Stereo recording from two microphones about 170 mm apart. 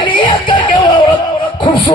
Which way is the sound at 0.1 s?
30° left (ahead or behind).